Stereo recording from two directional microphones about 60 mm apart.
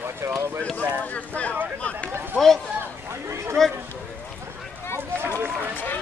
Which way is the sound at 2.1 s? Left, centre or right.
Right.